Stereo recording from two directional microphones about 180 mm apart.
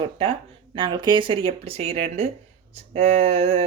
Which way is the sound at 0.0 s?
30° right (ahead or behind).